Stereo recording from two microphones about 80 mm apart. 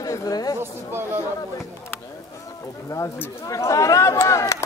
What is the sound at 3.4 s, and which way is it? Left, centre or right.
Speech, left.